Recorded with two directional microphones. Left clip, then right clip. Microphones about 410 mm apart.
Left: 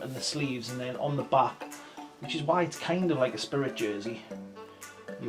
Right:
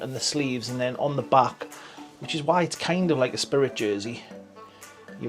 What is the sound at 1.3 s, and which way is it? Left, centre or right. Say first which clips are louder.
Speech: right 5 dB; right.